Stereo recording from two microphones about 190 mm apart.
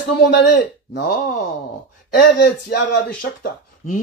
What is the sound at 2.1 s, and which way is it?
Speech, 60° left (ahead or behind).